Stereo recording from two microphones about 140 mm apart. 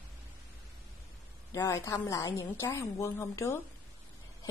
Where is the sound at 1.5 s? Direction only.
20° left (ahead or behind).